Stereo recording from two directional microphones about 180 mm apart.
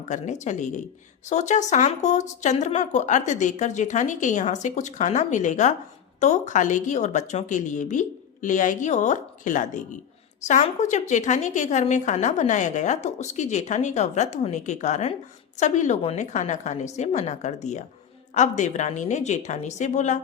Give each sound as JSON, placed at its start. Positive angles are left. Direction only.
{"t": 0.1, "sound": "a woman's voice", "side_deg": 40}